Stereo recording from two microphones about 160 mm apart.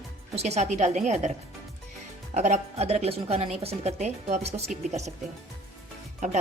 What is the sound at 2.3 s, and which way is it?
A woman's voice, 50° right (ahead or behind).